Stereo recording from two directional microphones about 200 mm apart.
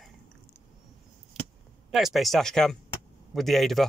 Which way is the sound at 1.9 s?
Centre (ahead or behind).